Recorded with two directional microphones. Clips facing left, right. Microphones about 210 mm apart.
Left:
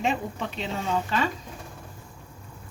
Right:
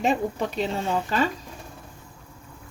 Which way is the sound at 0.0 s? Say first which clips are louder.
Right 4 dB; 40° right (ahead or behind).